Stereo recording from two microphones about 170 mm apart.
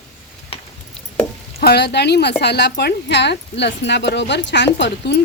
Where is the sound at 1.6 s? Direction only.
75° left (ahead or behind).